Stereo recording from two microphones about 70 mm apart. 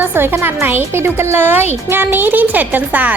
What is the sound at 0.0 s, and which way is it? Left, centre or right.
A woman's voice, right.